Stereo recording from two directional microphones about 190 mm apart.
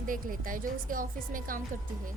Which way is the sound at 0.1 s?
45° right (ahead or behind).